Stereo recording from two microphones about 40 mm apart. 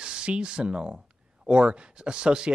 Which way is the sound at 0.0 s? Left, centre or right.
Right.